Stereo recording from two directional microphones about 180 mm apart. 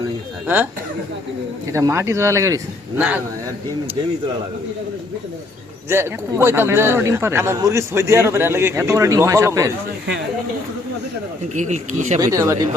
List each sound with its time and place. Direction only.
0.4 s speech: 10° right (ahead or behind)
1.7 s speech: 15° right (ahead or behind)
5.9 s speech: 15° right (ahead or behind)
11.5 s speech: 40° right (ahead or behind)
12.2 s speech: 15° right (ahead or behind)